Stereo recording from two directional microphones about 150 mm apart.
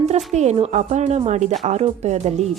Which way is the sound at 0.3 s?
50° right (ahead or behind).